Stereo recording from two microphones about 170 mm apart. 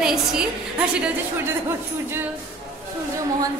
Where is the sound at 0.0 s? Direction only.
5° right (ahead or behind).